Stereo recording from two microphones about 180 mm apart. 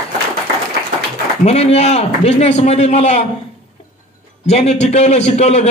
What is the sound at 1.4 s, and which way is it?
A man's voice, 35° left (ahead or behind).